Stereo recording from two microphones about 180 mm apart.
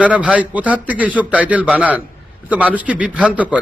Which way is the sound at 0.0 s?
5° right (ahead or behind).